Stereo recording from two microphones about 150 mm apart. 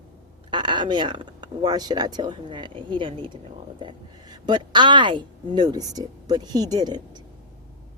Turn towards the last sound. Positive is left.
turn(degrees=-30)  # may be behind; listen again after turning